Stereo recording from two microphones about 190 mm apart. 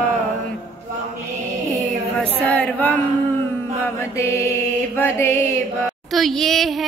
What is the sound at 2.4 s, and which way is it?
Female singing, 10° left (ahead or behind).